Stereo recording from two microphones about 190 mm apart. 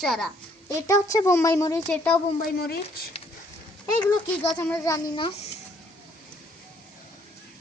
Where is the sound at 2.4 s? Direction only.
55° left (ahead or behind).